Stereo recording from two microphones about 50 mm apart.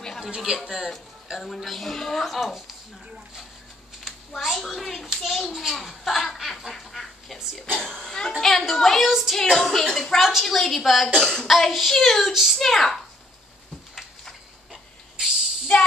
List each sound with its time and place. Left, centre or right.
0.7 s a woman's voice: centre
4.1 s a sound: centre
4.5 s a woman's voice: centre
7.7 s a woman's voice: centre
9.0 s speech: centre
9.3 s a woman's voice: centre
14.7 s hiss: centre
15.7 s music: left